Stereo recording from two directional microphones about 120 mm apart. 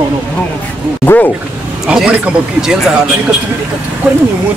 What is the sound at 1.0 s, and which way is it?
Speech, 15° left (ahead or behind).